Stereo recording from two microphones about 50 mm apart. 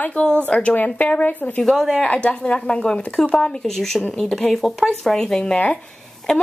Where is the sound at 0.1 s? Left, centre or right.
Centre.